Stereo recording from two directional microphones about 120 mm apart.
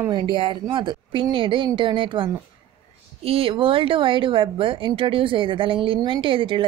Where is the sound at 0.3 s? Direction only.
45° right (ahead or behind).